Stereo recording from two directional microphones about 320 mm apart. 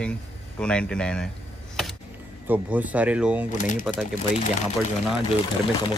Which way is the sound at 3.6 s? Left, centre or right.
Left.